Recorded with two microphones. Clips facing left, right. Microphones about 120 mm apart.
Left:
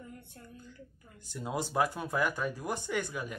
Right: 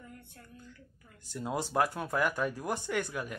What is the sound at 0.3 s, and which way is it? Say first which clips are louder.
Speech: left 3 dB; 25° left (ahead or behind).